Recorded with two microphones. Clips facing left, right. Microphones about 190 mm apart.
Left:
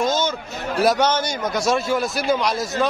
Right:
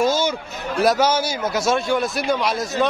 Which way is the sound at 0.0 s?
10° right (ahead or behind).